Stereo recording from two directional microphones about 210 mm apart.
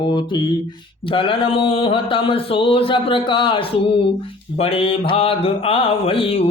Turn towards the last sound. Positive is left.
turn(degrees=25)  # may be behind; listen again after turning